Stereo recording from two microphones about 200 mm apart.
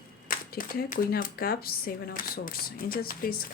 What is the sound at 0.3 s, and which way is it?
Speech, 45° left (ahead or behind).